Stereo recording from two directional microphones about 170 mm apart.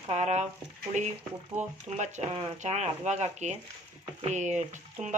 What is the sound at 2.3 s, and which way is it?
Speech, 30° right (ahead or behind).